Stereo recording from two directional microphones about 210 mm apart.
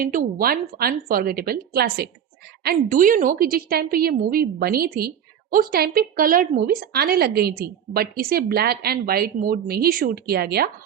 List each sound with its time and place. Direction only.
0.0 s a woman's voice: 40° right (ahead or behind)